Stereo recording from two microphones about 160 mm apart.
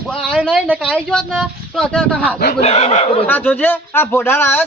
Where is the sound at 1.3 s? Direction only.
Centre (ahead or behind).